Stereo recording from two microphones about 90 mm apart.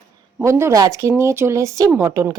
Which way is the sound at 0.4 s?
35° right (ahead or behind).